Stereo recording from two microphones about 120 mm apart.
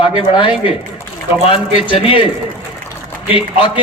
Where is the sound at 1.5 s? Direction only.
50° left (ahead or behind).